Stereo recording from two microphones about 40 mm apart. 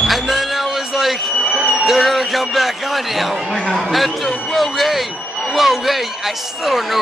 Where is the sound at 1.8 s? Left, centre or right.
Centre.